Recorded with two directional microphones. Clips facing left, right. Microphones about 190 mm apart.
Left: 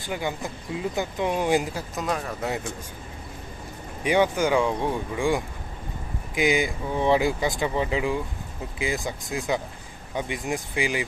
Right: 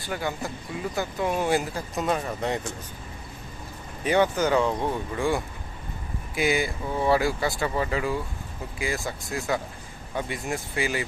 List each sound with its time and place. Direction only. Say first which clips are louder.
0.0 s speech: left 1 dB; 15° left (ahead or behind)
2.0 s speech: right 2 dB; centre (ahead or behind)
4.0 s speech: left 1 dB; 15° left (ahead or behind)